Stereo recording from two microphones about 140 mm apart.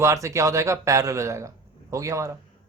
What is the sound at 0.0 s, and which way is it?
A man's voice, 20° right (ahead or behind).